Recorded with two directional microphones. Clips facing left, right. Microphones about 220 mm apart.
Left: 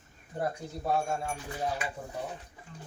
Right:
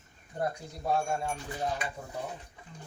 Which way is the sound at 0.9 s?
5° left (ahead or behind).